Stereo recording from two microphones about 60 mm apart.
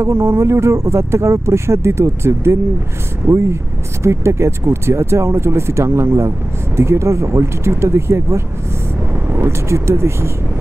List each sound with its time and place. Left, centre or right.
0.0 s speech: right